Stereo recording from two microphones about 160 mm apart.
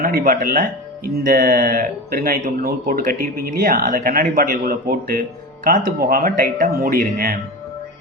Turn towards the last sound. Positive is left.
turn(degrees=-65)  # may be behind; listen again after turning